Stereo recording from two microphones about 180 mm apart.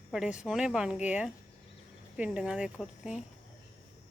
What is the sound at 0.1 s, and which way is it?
A woman's voice, 5° right (ahead or behind).